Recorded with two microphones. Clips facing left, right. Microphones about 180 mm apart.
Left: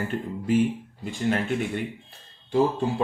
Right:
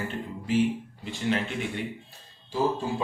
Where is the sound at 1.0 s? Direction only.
45° left (ahead or behind).